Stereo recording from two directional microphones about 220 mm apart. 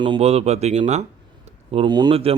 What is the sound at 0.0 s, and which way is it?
A man's voice, 25° right (ahead or behind).